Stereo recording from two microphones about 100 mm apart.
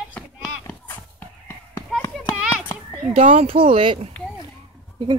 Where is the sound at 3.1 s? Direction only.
75° right (ahead or behind); by 4.1 s 60° right (ahead or behind).